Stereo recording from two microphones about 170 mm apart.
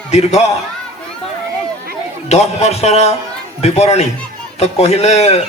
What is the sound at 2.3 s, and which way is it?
A man's voice, 40° left (ahead or behind).